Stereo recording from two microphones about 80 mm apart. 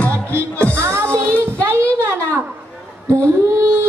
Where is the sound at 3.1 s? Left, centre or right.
Right.